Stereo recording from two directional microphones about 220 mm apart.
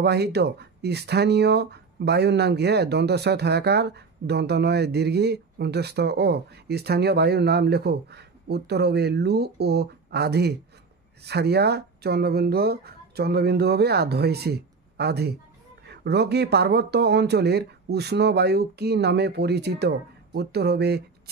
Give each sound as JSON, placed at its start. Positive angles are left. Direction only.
{"t": 0.0, "sound": "speech", "side_deg": -50}